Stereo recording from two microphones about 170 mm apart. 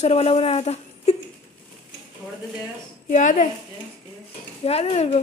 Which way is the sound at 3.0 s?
50° left (ahead or behind).